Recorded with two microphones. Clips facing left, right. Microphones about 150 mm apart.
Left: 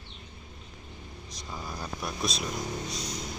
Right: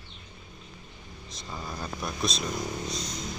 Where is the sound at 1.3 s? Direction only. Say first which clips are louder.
Right 1 dB; 10° left (ahead or behind).